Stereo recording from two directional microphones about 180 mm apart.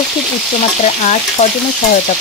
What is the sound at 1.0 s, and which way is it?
Frying, 40° left (ahead or behind).